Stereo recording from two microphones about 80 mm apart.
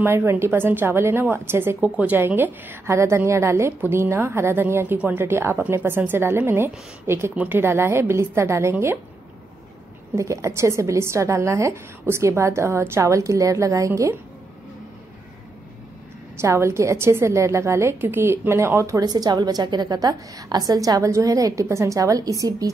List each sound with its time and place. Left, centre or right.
0.0 s a woman's voice: right
1.8 s a woman's voice: centre
3.0 s a woman's voice: right; by 5.2 s centre
5.2 s a woman's voice: right
10.1 s a woman's voice: right
16.3 s a woman's voice: right
18.9 s a woman's voice: right